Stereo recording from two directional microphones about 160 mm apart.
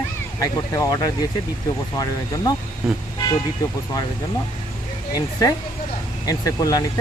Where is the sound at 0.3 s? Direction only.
20° left (ahead or behind).